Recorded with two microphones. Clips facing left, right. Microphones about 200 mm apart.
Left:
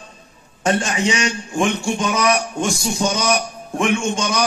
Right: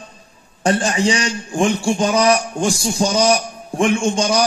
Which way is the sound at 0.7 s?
35° right (ahead or behind).